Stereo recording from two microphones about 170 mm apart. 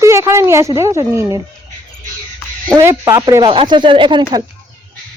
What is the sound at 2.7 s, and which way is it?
Speech, 20° right (ahead or behind).